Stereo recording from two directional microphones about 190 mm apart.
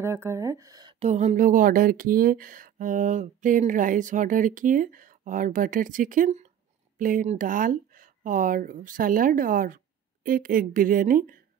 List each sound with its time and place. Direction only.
0.0 s speech: 15° right (ahead or behind)
0.9 s speech: 35° right (ahead or behind)